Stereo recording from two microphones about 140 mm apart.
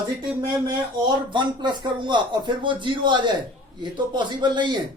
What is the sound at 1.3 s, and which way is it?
Speech, 35° right (ahead or behind).